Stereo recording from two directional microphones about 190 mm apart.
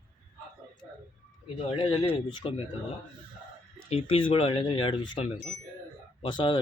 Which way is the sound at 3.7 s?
30° left (ahead or behind).